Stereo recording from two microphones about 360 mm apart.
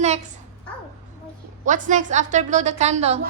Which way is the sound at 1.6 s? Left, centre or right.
Right.